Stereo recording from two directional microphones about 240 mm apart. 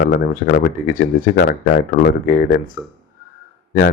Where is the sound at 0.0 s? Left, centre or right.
Left.